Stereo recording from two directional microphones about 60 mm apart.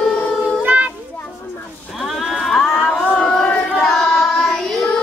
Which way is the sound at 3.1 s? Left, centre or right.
Left.